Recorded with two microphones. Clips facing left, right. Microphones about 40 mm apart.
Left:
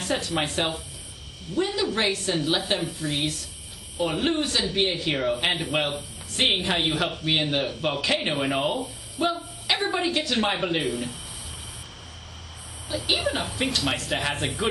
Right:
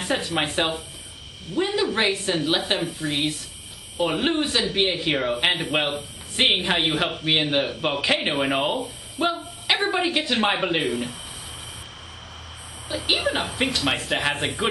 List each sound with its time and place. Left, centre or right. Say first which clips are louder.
0.0 s a woman's voice: right 2 dB; right
12.9 s speech: right 2 dB; right